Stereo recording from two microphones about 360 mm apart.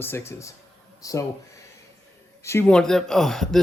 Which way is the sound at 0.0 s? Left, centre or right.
Centre.